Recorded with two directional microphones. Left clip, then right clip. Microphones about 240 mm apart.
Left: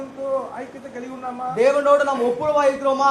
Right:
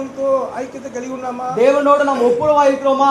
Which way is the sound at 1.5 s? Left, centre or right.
Left.